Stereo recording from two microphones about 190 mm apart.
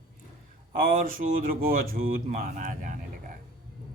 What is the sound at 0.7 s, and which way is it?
Speech, 45° right (ahead or behind).